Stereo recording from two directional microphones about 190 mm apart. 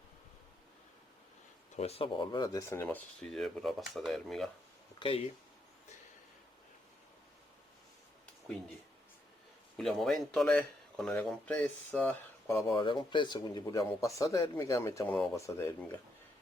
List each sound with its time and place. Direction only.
1.7 s speech: 35° left (ahead or behind); by 4.4 s centre (ahead or behind)
4.9 s speech: 30° left (ahead or behind)
9.7 s speech: centre (ahead or behind)
12.7 s speech: 25° left (ahead or behind)